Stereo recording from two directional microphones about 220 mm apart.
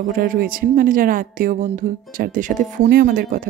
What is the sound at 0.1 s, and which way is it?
A woman's voice, 40° right (ahead or behind).